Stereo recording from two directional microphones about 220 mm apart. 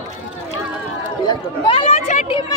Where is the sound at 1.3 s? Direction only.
20° left (ahead or behind).